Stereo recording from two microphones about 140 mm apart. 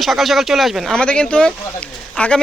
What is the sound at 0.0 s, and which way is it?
Speech, centre (ahead or behind).